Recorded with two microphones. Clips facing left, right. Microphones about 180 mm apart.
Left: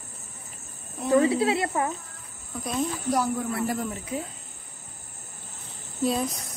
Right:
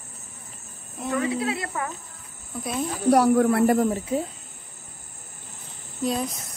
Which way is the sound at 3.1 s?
65° right (ahead or behind).